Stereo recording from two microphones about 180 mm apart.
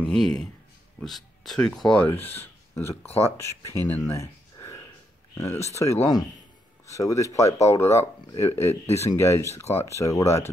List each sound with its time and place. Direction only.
0.0 s speech: 5° left (ahead or behind)
3.1 s speech: 35° left (ahead or behind)
3.3 s speech: 15° left (ahead or behind)